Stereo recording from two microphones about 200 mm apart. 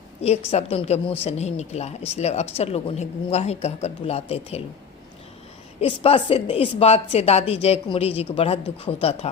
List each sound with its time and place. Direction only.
0.2 s speech: 30° left (ahead or behind)
5.8 s speech: 30° left (ahead or behind)